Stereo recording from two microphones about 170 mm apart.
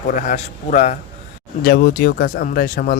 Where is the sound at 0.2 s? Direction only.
45° left (ahead or behind).